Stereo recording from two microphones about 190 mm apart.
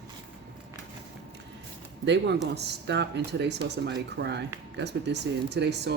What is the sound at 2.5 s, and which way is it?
Speech, 65° right (ahead or behind).